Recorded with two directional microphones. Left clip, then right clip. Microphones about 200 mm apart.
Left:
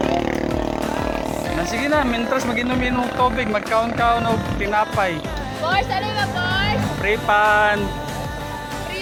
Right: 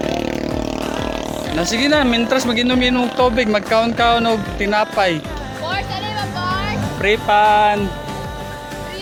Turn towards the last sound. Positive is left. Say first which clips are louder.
# right 3 dB
turn(degrees=-45)  # may be behind; listen again after turning